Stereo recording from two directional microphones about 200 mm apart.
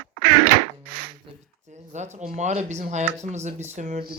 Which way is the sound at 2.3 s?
35° right (ahead or behind).